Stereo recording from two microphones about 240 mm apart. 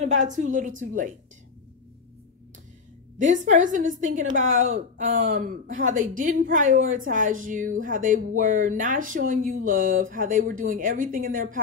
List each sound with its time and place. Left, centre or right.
0.0 s speech: right
3.2 s speech: right